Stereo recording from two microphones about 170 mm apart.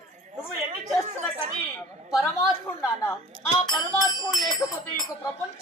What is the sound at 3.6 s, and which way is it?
Speech, 25° left (ahead or behind).